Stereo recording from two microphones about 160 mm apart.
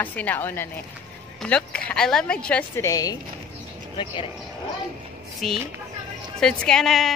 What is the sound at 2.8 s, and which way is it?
Speech, 20° left (ahead or behind).